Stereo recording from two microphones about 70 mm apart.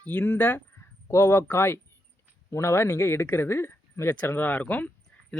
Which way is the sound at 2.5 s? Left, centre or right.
Left.